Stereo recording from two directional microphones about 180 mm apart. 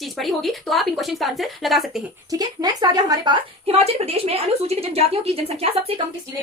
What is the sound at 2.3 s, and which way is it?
A woman's voice, 20° right (ahead or behind).